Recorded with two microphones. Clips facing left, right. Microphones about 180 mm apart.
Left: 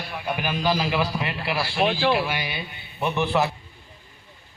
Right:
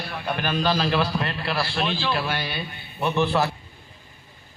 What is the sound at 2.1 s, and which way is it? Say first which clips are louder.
A man's voice: left 2 dB; 15° left (ahead or behind).